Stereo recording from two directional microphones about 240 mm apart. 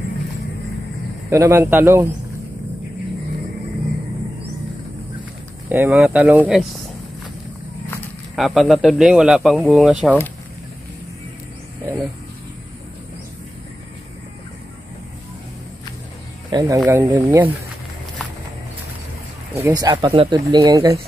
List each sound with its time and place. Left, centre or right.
1.3 s speech: centre
5.7 s speech: centre
7.9 s speech: centre
16.4 s speech: centre
19.5 s speech: centre